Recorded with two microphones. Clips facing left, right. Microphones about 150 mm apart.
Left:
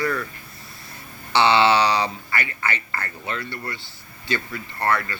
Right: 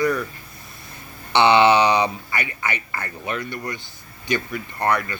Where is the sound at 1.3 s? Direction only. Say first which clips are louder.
Right 2 dB; 20° right (ahead or behind).